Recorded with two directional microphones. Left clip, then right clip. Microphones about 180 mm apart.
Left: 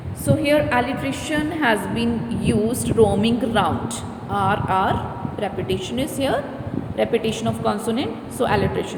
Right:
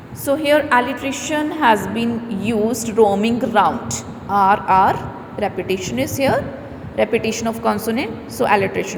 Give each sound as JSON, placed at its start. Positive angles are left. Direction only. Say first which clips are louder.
{"t": 0.3, "sound": "a woman's voice", "louder": "right 3 dB", "side_deg": -20}